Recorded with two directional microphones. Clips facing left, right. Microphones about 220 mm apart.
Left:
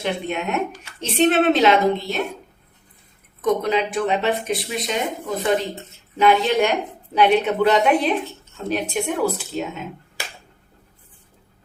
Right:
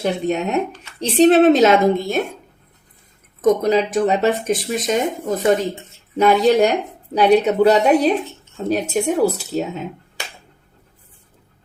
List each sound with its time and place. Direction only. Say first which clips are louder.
0.0 s speech: right 5 dB; 40° right (ahead or behind)
3.4 s speech: right 5 dB; 40° right (ahead or behind)